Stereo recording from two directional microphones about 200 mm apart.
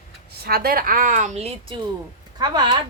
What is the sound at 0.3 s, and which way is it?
A woman's voice, 50° right (ahead or behind).